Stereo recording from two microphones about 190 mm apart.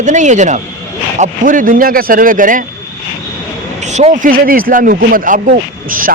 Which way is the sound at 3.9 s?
40° right (ahead or behind).